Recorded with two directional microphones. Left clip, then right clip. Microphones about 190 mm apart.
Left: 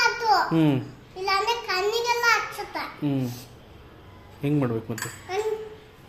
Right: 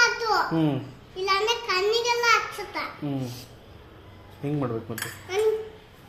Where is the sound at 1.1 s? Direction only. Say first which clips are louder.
Even; 15° left (ahead or behind).